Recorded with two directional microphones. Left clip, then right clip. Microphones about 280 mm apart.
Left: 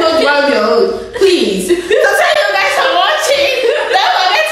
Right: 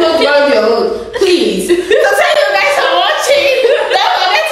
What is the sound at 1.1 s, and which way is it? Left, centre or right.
Chuckle, centre.